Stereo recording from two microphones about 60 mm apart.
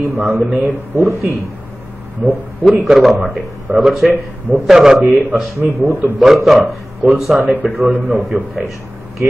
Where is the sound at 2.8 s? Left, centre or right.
Centre.